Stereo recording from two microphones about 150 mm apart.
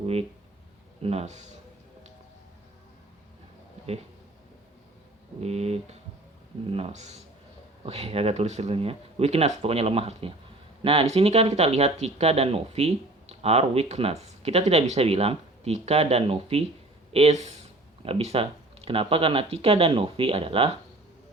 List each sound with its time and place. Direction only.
0.0 s speech: 40° right (ahead or behind)
5.4 s speech: 45° right (ahead or behind)